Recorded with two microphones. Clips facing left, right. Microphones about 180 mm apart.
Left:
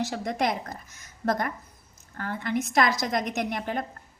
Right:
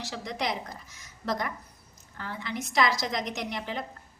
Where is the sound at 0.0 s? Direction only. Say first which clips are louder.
Left 6 dB; 50° left (ahead or behind).